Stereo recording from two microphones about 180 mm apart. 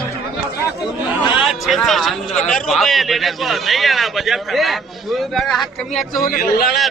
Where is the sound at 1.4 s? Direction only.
Centre (ahead or behind).